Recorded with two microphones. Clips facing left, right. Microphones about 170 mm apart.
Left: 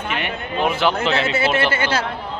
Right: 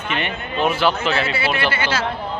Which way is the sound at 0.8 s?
20° left (ahead or behind).